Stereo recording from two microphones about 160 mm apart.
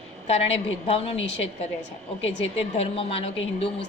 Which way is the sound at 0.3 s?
40° left (ahead or behind).